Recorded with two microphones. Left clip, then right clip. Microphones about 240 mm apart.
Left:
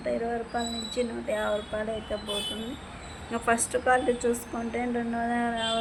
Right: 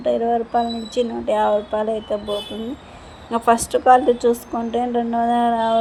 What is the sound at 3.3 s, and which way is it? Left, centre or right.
A woman's voice, centre.